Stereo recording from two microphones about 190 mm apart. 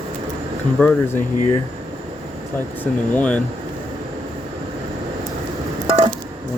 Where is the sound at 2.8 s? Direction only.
5° left (ahead or behind).